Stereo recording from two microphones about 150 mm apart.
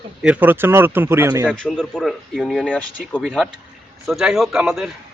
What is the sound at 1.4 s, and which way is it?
Speech, 5° left (ahead or behind).